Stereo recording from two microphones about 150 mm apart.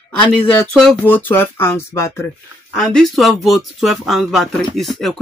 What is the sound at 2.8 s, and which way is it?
Speech, centre (ahead or behind).